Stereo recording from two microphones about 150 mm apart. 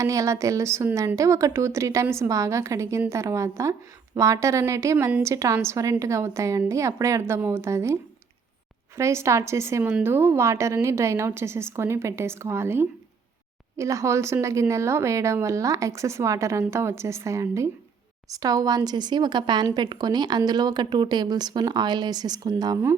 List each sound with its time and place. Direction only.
0.0 s a woman's voice: 20° right (ahead or behind)
9.0 s a woman's voice: 20° right (ahead or behind)